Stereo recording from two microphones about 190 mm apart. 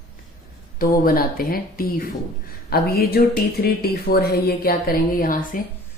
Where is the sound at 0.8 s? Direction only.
50° left (ahead or behind).